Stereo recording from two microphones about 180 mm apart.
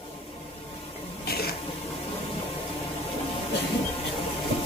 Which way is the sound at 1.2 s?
60° left (ahead or behind).